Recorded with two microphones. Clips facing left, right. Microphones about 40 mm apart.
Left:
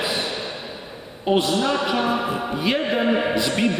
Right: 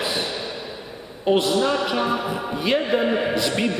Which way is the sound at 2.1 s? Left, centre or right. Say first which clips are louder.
Left 1 dB; left.